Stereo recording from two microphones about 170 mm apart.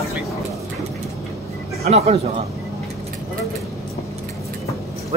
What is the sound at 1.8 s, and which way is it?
Speech, 40° right (ahead or behind).